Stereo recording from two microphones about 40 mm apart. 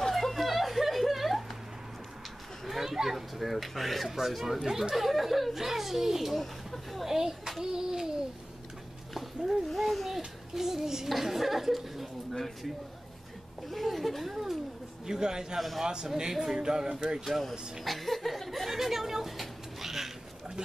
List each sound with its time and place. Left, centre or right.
0.1 s a sound: centre
2.6 s a child's voice: centre
6.4 s a sound: centre
7.1 s a child's voice: centre
9.4 s speech: centre
9.7 s a child's voice: centre
17.2 s speech: centre